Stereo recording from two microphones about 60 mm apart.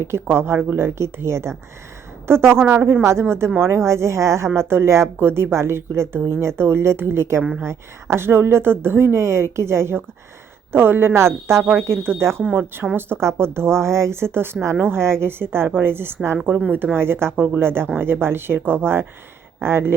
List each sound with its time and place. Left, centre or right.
0.0 s a woman's voice: right
3.0 s a woman's voice: right